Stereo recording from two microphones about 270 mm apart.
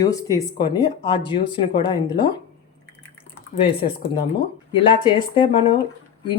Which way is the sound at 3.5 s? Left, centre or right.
Centre.